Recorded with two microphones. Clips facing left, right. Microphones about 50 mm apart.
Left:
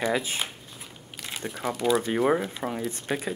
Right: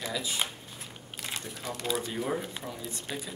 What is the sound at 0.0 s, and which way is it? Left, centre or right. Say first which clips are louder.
Speech: left 6 dB; left.